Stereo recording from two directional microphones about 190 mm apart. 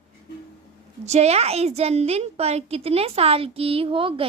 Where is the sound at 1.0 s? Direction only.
35° right (ahead or behind).